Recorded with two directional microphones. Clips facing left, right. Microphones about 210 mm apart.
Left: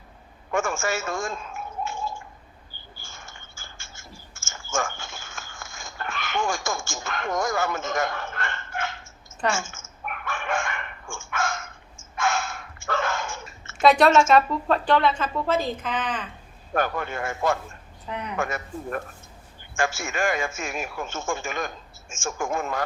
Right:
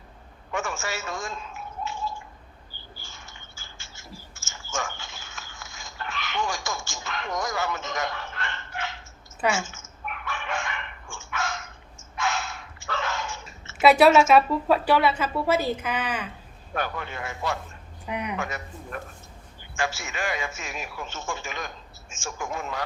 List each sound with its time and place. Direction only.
0.5 s a sound: 50° left (ahead or behind)
3.0 s typing: 50° left (ahead or behind)
9.6 s dog: 50° left (ahead or behind)
13.8 s a woman's voice: 5° right (ahead or behind)
16.7 s a man's voice: 50° left (ahead or behind)
18.0 s speech: 10° right (ahead or behind)
18.3 s a man's voice: 50° left (ahead or behind)